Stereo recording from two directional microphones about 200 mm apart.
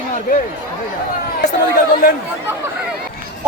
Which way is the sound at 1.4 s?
50° left (ahead or behind).